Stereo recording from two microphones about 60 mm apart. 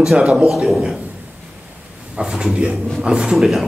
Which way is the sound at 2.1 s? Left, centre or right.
Centre.